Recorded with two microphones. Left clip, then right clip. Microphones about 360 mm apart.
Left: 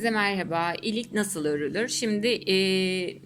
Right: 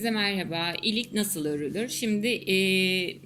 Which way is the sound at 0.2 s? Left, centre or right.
Left.